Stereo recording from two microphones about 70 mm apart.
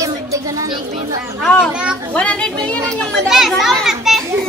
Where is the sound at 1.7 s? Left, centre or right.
Centre.